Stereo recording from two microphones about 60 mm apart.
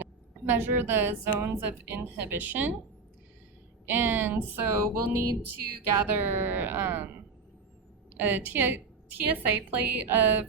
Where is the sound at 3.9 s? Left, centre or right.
Right.